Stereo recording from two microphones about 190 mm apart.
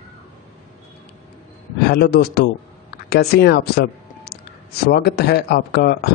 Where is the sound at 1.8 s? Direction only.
55° left (ahead or behind).